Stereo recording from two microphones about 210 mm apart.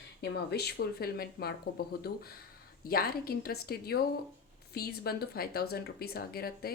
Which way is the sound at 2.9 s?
45° left (ahead or behind).